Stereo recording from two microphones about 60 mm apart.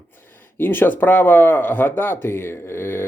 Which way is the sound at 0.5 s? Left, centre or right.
Left.